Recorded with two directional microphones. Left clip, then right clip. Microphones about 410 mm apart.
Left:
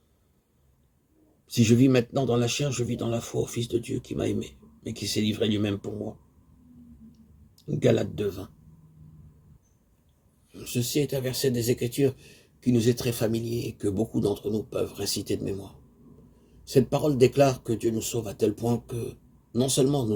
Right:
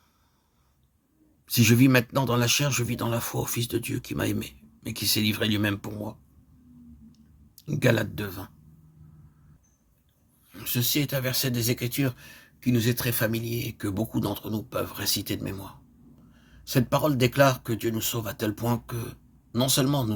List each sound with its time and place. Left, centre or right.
1.5 s speech: right
7.1 s a sound: right
10.5 s speech: right